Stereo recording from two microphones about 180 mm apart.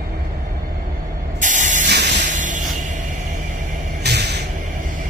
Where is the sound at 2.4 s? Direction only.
45° right (ahead or behind).